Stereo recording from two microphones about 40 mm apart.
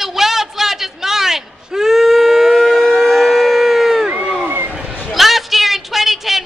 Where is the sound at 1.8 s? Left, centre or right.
Centre.